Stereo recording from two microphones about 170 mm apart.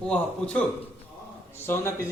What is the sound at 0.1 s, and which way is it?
Speech, 5° left (ahead or behind).